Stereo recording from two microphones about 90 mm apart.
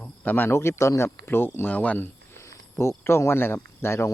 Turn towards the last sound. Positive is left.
turn(degrees=30)  # may be behind; listen again after turning